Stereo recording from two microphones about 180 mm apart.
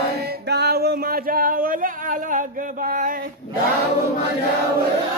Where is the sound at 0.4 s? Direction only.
65° right (ahead or behind); by 3.2 s 50° right (ahead or behind).